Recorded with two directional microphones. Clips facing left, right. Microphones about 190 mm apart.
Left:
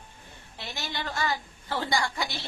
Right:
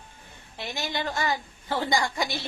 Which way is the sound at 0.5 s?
15° right (ahead or behind).